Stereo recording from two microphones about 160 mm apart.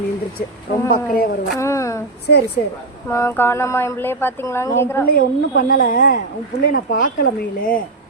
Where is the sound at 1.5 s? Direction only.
20° left (ahead or behind).